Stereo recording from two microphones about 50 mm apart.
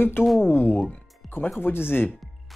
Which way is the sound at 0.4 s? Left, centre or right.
Left.